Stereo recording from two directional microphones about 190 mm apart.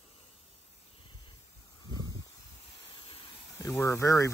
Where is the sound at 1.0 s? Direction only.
25° left (ahead or behind).